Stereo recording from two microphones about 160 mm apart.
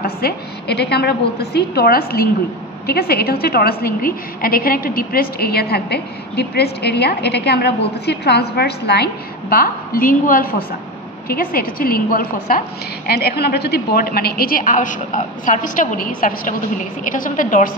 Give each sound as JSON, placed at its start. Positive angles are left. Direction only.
{"t": 0.0, "sound": "a woman's voice", "side_deg": 80}